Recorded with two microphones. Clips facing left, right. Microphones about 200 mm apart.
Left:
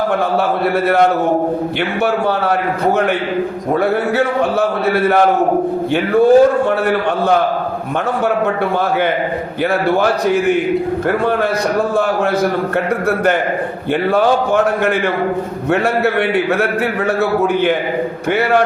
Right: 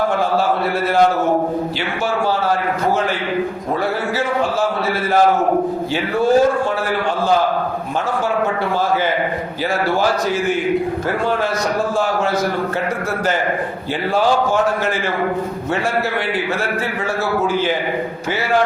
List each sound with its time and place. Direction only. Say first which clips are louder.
0.9 s a man's voice: left 1 dB; 60° left (ahead or behind)
4.9 s a man's voice: left 3 dB; 60° left (ahead or behind)
10.0 s a man's voice: left 4 dB; 60° left (ahead or behind)
14.1 s a man's voice: left 2 dB; 60° left (ahead or behind)
17.4 s a man's voice: left 4 dB; 60° left (ahead or behind)